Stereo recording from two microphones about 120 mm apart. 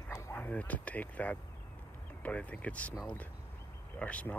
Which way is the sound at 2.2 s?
10° left (ahead or behind).